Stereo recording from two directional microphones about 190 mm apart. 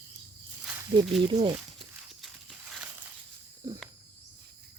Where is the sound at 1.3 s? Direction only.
25° right (ahead or behind).